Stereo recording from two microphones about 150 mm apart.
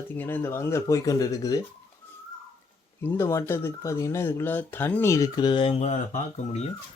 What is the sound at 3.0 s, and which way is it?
Speech, 15° left (ahead or behind).